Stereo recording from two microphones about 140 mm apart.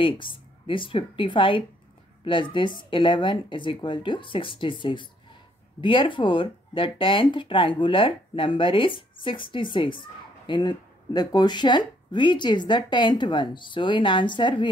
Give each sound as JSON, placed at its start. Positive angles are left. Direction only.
{"t": 0.0, "sound": "speech", "side_deg": 35}